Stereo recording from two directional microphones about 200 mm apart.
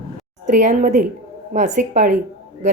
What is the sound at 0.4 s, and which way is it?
A woman's voice, 40° right (ahead or behind).